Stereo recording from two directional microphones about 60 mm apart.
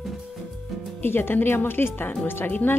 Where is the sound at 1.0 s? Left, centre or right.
Left.